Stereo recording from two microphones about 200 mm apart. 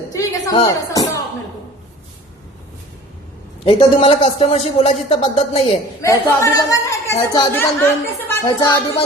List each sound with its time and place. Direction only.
0.1 s music: 15° left (ahead or behind)
3.6 s a man's voice: 30° left (ahead or behind)
6.0 s a woman's voice: 15° left (ahead or behind)